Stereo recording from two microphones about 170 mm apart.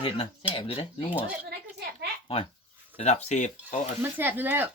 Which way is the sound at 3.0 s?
45° left (ahead or behind).